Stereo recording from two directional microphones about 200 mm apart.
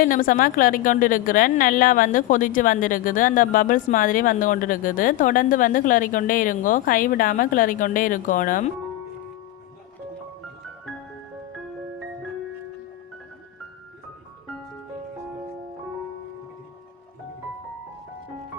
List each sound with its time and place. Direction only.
0.0 s a woman's voice: 45° left (ahead or behind)